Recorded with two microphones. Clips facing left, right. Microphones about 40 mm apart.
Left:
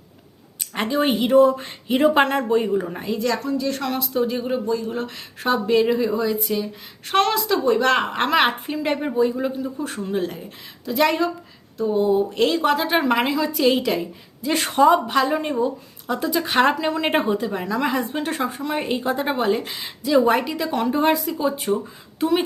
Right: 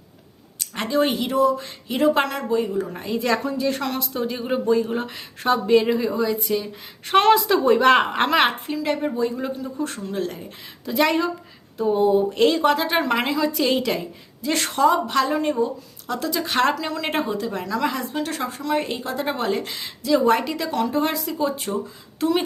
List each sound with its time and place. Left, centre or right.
0.6 s a woman's voice: centre
1.3 s speech: left
2.9 s speech: centre
3.2 s a woman's voice: right
3.8 s speech: centre
4.6 s speech: right
5.1 s speech: centre
7.1 s a woman's voice: centre
8.7 s speech: left
9.0 s speech: centre
10.8 s speech: centre
20.7 s speech: centre
21.2 s speech: centre